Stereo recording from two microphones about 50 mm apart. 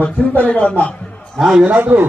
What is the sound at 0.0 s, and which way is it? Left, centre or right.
Speech, left.